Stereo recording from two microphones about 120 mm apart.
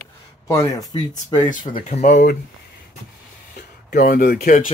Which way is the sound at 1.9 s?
90° left.